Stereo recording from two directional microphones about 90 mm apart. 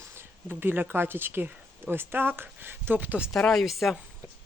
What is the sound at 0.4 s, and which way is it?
Speech, 25° right (ahead or behind).